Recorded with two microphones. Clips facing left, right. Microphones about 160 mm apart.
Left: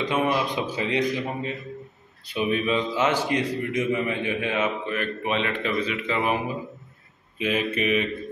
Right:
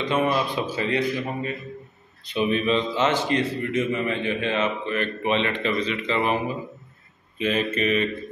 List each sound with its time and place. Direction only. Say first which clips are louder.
0.0 s a man's voice: right 1 dB; 10° left (ahead or behind)